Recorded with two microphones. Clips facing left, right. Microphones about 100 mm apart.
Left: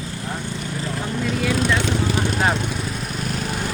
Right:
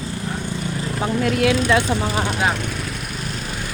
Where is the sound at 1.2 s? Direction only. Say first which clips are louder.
Right 3 dB; 70° right (ahead or behind).